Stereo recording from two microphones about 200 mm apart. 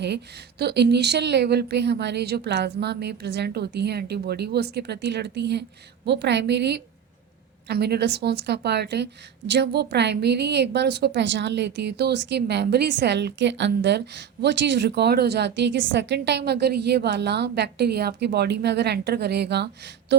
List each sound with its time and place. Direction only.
0.6 s a woman's voice: 55° right (ahead or behind)